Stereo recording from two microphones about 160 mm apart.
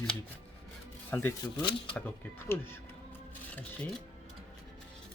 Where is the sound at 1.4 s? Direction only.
30° left (ahead or behind).